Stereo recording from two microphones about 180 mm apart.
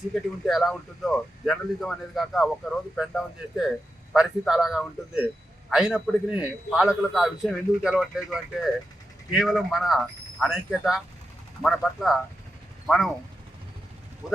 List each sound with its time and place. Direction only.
0.1 s speech: centre (ahead or behind)
14.2 s speech: centre (ahead or behind)